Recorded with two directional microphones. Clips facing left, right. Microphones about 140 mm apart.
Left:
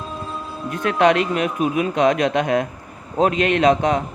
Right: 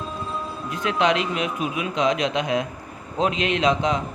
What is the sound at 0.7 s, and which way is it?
A man's voice, 55° left (ahead or behind).